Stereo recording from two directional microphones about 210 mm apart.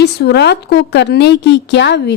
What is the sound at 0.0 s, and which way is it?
A woman's voice, 50° left (ahead or behind).